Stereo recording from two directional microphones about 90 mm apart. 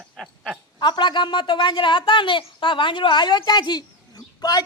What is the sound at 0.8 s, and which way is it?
A woman's voice, 60° left (ahead or behind).